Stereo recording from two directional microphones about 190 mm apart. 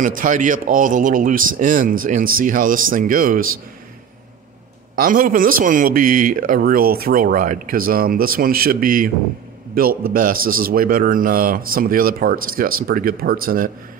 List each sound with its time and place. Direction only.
0.0 s speech: 45° right (ahead or behind)
5.0 s speech: 45° right (ahead or behind)